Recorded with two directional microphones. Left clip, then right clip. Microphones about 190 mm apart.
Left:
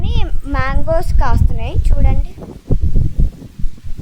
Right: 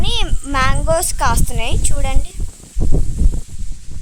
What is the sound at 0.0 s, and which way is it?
A child's voice, 15° right (ahead or behind).